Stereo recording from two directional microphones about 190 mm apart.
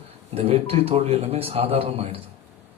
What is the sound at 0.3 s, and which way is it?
A man's voice, 30° right (ahead or behind).